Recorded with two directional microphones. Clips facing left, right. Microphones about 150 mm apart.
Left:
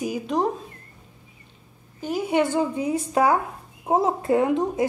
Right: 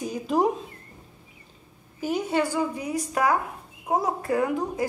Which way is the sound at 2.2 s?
20° left (ahead or behind).